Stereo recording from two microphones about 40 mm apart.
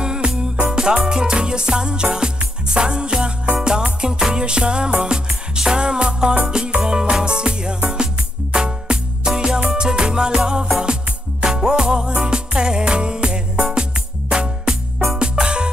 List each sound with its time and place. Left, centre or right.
0.0 s music: right